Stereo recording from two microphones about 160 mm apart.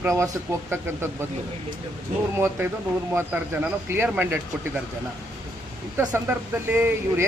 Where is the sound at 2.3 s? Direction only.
15° right (ahead or behind).